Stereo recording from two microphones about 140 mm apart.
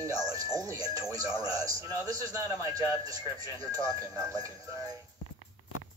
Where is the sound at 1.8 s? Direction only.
25° right (ahead or behind).